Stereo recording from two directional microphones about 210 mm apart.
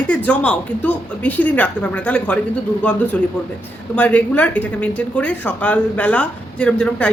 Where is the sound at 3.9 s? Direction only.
5° left (ahead or behind).